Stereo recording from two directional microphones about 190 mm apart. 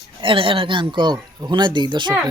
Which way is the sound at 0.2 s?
25° right (ahead or behind).